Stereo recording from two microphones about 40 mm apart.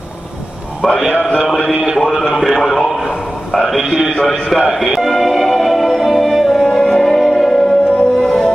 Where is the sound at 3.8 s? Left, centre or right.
Centre.